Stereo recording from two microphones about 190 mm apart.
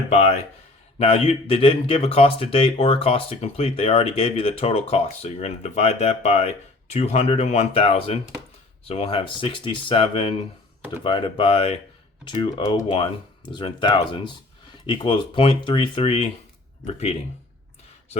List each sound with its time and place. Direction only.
0.1 s speech: 35° left (ahead or behind)